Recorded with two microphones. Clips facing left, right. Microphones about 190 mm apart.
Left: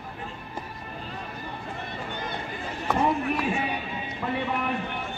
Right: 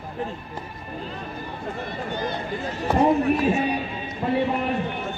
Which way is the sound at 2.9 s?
35° right (ahead or behind).